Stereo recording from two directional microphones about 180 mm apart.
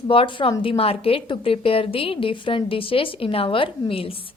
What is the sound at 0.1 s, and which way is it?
A woman's voice, 30° left (ahead or behind).